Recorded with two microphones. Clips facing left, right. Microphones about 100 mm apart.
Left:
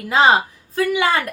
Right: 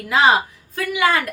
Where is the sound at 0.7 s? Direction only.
30° left (ahead or behind).